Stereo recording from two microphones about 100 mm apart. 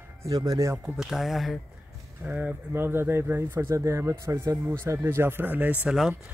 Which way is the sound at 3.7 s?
35° right (ahead or behind).